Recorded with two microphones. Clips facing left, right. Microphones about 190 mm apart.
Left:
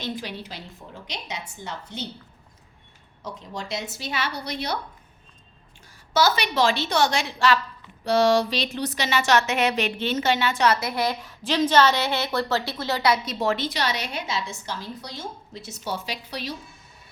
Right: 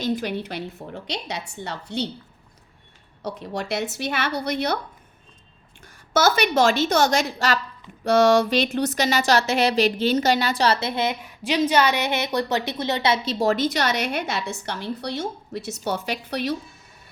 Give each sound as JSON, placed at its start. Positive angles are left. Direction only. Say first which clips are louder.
{"t": 0.0, "sound": "a woman's voice", "louder": "right 7 dB", "side_deg": -55}
{"t": 3.2, "sound": "a woman's voice", "louder": "right 6 dB", "side_deg": -70}
{"t": 5.8, "sound": "a woman's voice", "louder": "right 2 dB", "side_deg": -50}
{"t": 11.4, "sound": "a woman's voice", "louder": "even", "side_deg": -10}
{"t": 13.4, "sound": "a woman's voice", "louder": "right 4 dB", "side_deg": -40}